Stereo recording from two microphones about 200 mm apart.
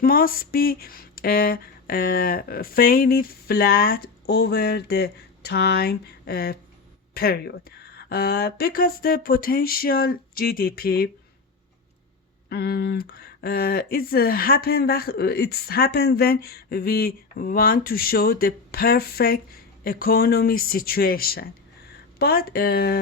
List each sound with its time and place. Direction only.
0.0 s speech: 45° left (ahead or behind)
12.5 s speech: 50° left (ahead or behind)